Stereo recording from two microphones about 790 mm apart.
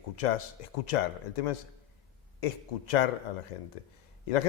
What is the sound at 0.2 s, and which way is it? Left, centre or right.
Speech, left.